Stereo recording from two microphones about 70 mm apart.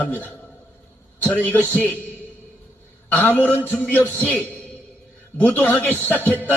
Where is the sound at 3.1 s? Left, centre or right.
Left.